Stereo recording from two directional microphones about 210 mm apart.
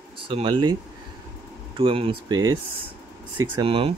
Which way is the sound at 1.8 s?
25° right (ahead or behind).